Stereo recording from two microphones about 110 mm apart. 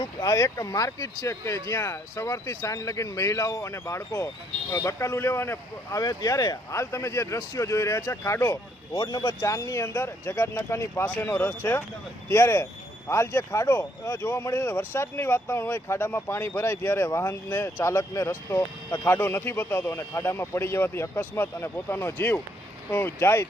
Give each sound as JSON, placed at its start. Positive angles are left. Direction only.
{"t": 0.0, "sound": "speech", "side_deg": 30}
{"t": 6.0, "sound": "speech", "side_deg": 35}